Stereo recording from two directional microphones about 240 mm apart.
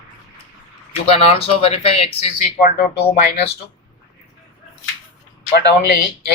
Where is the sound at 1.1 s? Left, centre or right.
Left.